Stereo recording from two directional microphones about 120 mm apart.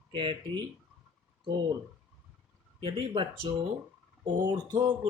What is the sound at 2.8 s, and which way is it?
Speech, 45° right (ahead or behind).